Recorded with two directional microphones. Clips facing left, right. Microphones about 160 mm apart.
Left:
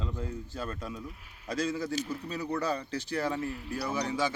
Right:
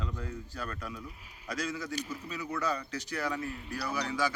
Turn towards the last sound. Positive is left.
turn(degrees=25)  # may be behind; listen again after turning